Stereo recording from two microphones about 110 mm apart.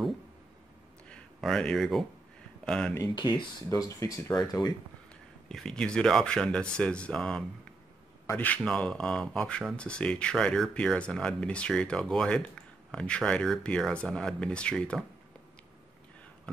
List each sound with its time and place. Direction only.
1.0 s a sound: 5° left (ahead or behind)
2.6 s speech: 5° left (ahead or behind)
3.2 s speech: 50° left (ahead or behind)
3.6 s speech: 25° left (ahead or behind)
5.5 s speech: 5° left (ahead or behind)